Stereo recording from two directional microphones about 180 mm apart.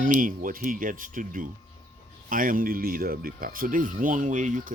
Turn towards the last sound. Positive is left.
turn(degrees=-45)  # may be behind; listen again after turning